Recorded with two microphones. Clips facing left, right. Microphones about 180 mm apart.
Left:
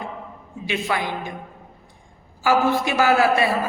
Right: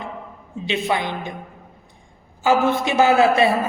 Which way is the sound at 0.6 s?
20° right (ahead or behind).